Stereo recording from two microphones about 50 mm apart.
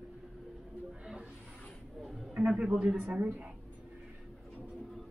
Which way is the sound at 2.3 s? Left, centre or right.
Centre.